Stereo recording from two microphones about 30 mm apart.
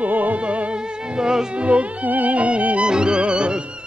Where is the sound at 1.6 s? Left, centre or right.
Right.